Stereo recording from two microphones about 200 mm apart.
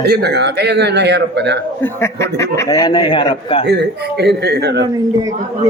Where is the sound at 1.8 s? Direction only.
15° left (ahead or behind).